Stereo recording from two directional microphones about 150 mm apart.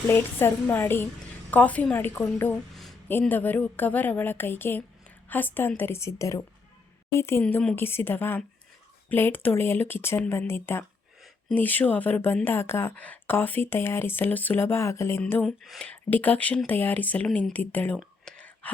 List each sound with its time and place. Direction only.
0.1 s speech: 15° left (ahead or behind)
7.4 s speech: 5° left (ahead or behind)